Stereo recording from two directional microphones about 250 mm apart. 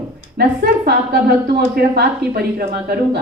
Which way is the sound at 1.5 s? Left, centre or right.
Right.